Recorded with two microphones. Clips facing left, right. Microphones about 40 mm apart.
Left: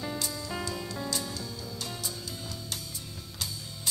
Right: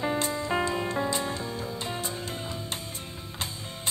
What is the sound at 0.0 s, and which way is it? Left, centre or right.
Music, right.